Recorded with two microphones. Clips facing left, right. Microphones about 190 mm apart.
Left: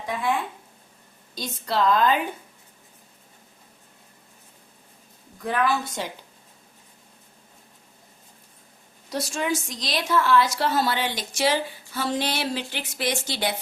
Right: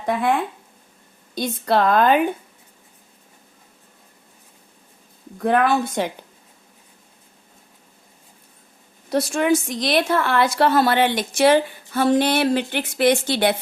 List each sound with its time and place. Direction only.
0.0 s a woman's voice: 55° right (ahead or behind)
1.4 s a woman's voice: 60° right (ahead or behind)
5.4 s a woman's voice: 60° right (ahead or behind)
9.0 s a woman's voice: 55° right (ahead or behind)